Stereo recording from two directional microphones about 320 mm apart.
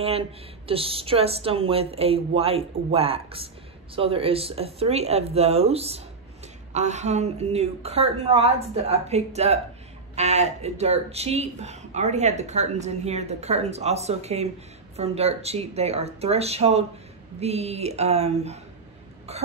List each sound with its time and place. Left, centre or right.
0.7 s a woman's voice: centre